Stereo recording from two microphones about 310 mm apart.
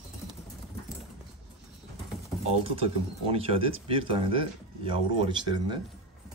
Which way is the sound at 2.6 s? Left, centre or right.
Centre.